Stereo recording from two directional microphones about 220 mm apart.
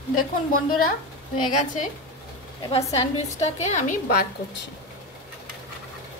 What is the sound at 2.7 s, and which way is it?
A woman's voice, 30° left (ahead or behind).